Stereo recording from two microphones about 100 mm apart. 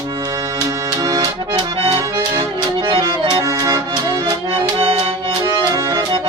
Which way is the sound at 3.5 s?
35° right (ahead or behind).